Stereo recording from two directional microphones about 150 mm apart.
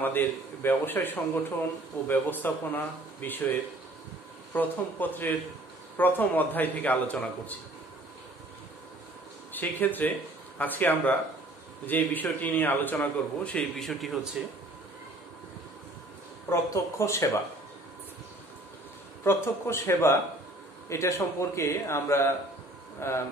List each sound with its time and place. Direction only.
0.0 s a man's voice: 15° left (ahead or behind)
4.6 s a man's voice: 10° left (ahead or behind)
9.5 s a man's voice: 10° left (ahead or behind)
16.4 s speech: 20° left (ahead or behind)
19.2 s a man's voice: 15° left (ahead or behind)